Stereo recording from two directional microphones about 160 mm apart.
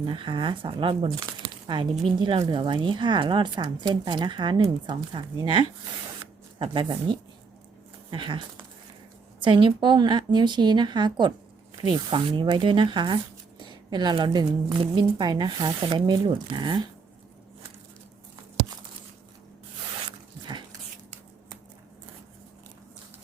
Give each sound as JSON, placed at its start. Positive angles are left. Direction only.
{"t": 0.0, "sound": "speech", "side_deg": -30}
{"t": 20.4, "sound": "dog", "side_deg": -30}